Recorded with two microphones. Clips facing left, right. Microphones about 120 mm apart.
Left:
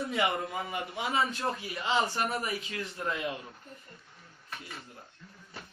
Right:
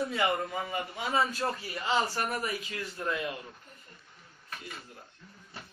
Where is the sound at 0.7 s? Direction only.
15° left (ahead or behind).